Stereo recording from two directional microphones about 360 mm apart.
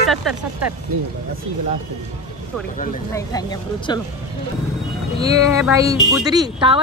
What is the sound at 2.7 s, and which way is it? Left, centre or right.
Speech, left.